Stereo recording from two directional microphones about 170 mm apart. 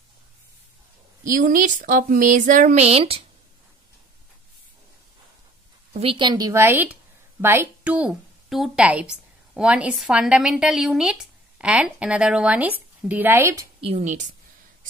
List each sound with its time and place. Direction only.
1.2 s speech: 50° right (ahead or behind)
5.9 s a woman's voice: 30° right (ahead or behind); by 13.7 s 15° right (ahead or behind)
13.7 s a woman's voice: 35° right (ahead or behind)